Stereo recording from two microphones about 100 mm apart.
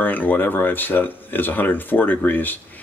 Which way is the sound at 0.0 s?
20° left (ahead or behind).